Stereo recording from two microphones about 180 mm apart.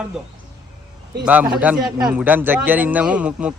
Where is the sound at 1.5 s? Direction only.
5° right (ahead or behind).